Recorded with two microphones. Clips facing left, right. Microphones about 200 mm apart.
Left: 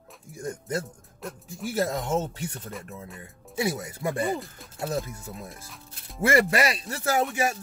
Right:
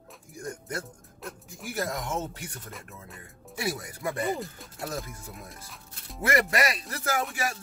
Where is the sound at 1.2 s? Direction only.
Centre (ahead or behind).